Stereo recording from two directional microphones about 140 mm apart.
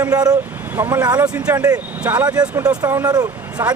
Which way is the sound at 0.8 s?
15° right (ahead or behind).